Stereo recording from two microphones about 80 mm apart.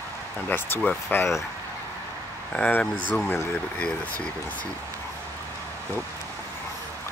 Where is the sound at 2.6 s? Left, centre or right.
Centre.